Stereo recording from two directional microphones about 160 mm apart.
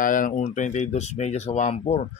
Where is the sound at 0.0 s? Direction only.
55° left (ahead or behind).